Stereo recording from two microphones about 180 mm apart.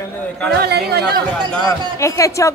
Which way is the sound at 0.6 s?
65° right (ahead or behind).